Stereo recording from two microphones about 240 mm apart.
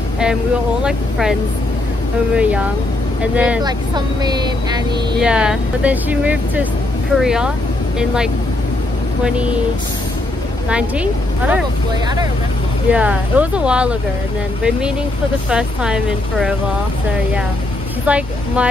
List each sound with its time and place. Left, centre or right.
0.8 s speech: centre
2.3 s speech: centre
3.6 s speech: centre
5.2 s speech: centre
10.7 s speech: centre
12.9 s speech: centre
15.5 s speech: centre
18.0 s speech: centre